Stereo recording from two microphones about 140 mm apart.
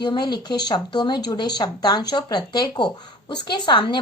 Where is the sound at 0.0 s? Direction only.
30° left (ahead or behind).